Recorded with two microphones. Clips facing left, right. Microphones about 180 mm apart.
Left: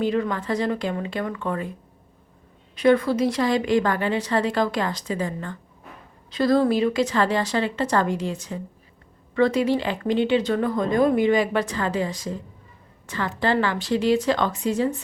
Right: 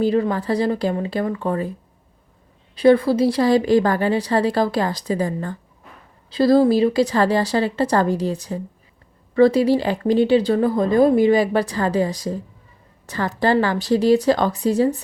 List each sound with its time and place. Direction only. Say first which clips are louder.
0.0 s speech: right 5 dB; 35° right (ahead or behind)
2.7 s speech: right 4 dB; 30° right (ahead or behind)